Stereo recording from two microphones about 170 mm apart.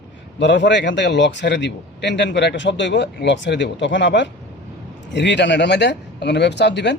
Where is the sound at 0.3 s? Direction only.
90° left.